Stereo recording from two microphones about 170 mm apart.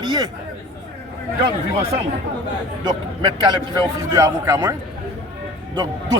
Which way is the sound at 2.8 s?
25° right (ahead or behind).